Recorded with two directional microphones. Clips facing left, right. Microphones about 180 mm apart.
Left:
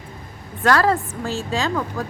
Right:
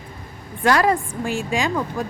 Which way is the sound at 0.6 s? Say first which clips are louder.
Even; 15° right (ahead or behind).